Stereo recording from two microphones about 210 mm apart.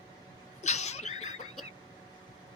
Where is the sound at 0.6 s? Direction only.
30° left (ahead or behind).